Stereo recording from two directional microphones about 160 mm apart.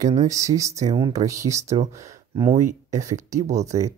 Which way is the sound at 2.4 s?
45° right (ahead or behind).